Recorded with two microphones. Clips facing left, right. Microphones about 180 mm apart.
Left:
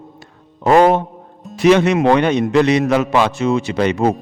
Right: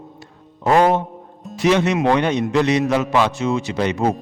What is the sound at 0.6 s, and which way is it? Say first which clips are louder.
Music: left 4 dB; 70° left (ahead or behind).